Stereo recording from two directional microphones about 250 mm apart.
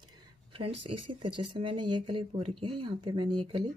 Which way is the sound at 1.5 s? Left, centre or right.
Centre.